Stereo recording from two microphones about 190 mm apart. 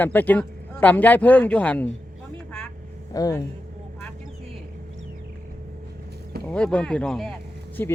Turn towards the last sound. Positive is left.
turn(degrees=10)  # may be behind; listen again after turning